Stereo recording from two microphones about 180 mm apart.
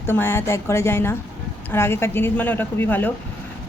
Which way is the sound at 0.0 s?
10° left (ahead or behind).